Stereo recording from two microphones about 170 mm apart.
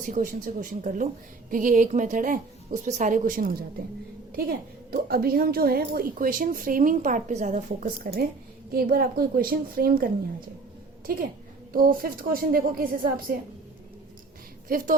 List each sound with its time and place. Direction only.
0.0 s a woman's voice: 50° right (ahead or behind)
14.7 s a woman's voice: 55° right (ahead or behind)